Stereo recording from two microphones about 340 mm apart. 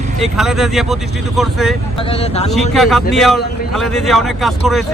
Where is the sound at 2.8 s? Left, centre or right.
Centre.